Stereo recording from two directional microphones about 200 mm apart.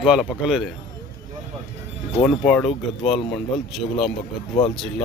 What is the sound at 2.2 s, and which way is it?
Speech, 5° left (ahead or behind).